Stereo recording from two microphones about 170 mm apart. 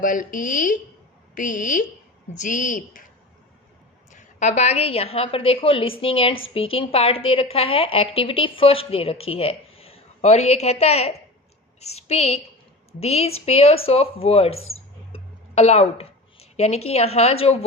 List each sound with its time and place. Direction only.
0.0 s speech: 50° left (ahead or behind)
4.1 s a woman's voice: 45° left (ahead or behind)